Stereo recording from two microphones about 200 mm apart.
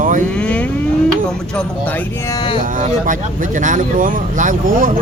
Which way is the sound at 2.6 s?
40° right (ahead or behind).